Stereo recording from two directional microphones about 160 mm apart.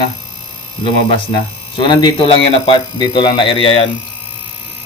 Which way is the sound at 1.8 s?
30° left (ahead or behind).